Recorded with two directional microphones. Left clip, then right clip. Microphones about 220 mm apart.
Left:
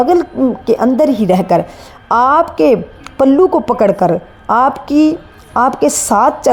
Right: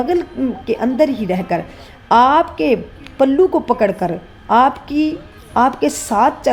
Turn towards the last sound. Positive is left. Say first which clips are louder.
# left 4 dB
turn(degrees=30)  # may be behind; listen again after turning